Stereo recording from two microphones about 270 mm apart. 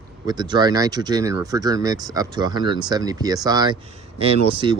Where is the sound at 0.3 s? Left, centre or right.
Centre.